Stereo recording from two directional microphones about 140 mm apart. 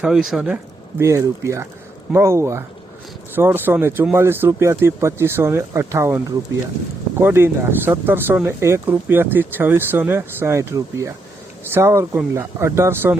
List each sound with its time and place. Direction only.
0.0 s speech: 5° right (ahead or behind)
1.0 s speech: 20° right (ahead or behind)